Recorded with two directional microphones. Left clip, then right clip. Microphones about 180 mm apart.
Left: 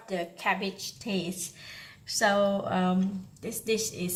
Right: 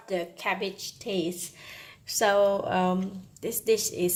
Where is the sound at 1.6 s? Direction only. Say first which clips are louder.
Right 1 dB; 45° right (ahead or behind).